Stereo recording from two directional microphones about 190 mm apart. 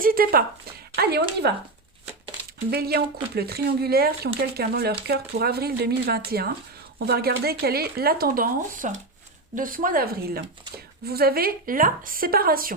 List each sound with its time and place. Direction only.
0.0 s speech: 50° right (ahead or behind)
1.4 s speech: 60° right (ahead or behind)
2.6 s a woman's voice: 55° right (ahead or behind)